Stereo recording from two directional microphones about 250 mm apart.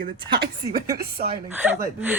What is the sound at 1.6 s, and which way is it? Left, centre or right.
Speech, centre.